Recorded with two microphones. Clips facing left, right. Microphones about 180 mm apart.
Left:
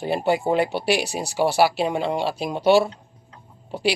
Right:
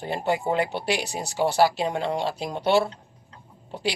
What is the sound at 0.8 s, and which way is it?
Speech, 10° left (ahead or behind).